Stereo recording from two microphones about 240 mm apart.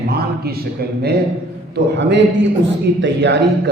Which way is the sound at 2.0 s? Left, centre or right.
Right.